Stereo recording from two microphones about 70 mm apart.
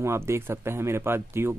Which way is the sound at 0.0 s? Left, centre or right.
Right.